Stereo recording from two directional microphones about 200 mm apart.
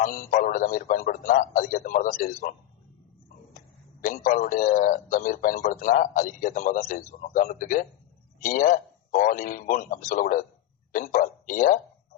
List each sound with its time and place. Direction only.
0.0 s a man's voice: 40° left (ahead or behind)
4.0 s a man's voice: 40° left (ahead or behind)